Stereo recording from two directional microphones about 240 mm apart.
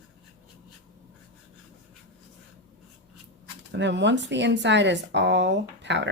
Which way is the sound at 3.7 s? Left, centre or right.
Right.